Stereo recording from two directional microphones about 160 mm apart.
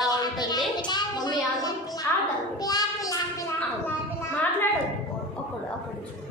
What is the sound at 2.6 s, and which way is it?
Child singing, 25° left (ahead or behind).